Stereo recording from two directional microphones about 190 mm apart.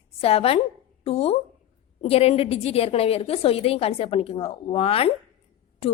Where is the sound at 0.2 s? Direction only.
30° left (ahead or behind).